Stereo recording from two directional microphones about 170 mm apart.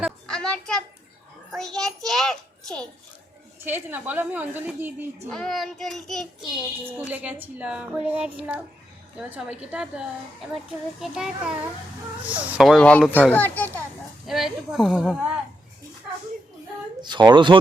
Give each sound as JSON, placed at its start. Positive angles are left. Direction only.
{"t": 0.3, "sound": "a sound", "side_deg": 5}
{"t": 1.5, "sound": "a child's voice", "side_deg": 0}
{"t": 3.6, "sound": "a woman's voice", "side_deg": -10}
{"t": 5.3, "sound": "a child's voice", "side_deg": 0}
{"t": 6.5, "sound": "a woman's voice", "side_deg": -10}
{"t": 14.3, "sound": "a child's voice", "side_deg": 0}
{"t": 17.0, "sound": "speech", "side_deg": -25}